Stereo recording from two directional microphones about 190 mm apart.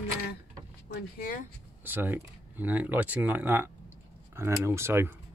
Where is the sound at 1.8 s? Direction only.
10° right (ahead or behind).